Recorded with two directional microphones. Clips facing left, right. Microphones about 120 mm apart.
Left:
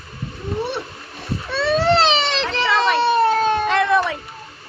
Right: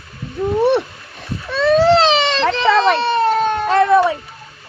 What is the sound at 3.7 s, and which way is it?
Cat, 35° right (ahead or behind).